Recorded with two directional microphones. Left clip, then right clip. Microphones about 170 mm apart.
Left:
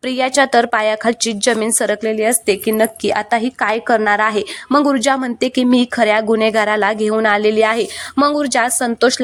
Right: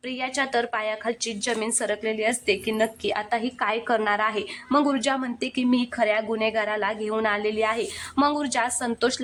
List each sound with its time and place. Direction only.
0.0 s a woman's voice: 40° left (ahead or behind)